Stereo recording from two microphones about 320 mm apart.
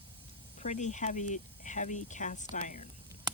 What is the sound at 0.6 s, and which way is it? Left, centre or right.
Speech, left.